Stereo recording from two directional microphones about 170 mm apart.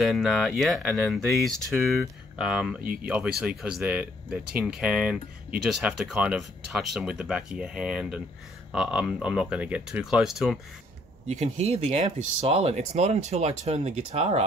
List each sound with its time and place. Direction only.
0.0 s speech: centre (ahead or behind)
2.8 s speech: 60° right (ahead or behind)
3.1 s speech: 5° right (ahead or behind)
11.2 s speech: 40° right (ahead or behind)